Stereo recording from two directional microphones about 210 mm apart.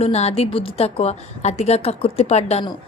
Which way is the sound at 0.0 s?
30° left (ahead or behind).